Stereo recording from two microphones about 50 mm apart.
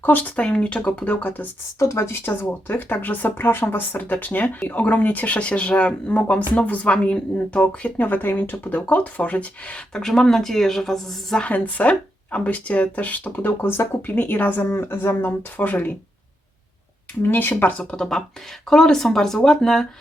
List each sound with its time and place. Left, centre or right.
0.0 s speech: left
1.0 s speech: left
1.8 s speech: left
2.5 s speech: left
3.3 s speech: left
9.9 s speech: centre
11.3 s speech: left
14.2 s speech: left
14.8 s speech: left
17.2 s speech: left
17.6 s speech: left
17.9 s speech: centre